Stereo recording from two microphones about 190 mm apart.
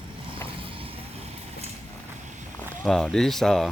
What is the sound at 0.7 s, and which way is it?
Vehicle, 30° right (ahead or behind).